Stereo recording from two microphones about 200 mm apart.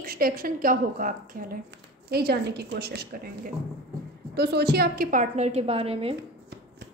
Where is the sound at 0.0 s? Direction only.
50° right (ahead or behind).